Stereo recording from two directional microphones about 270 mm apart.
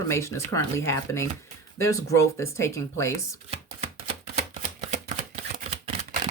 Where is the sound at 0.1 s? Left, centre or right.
Centre.